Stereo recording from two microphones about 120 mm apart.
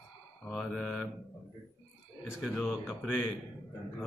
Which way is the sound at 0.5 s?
Centre (ahead or behind).